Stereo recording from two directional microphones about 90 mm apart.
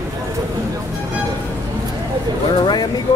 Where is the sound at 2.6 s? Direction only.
55° left (ahead or behind).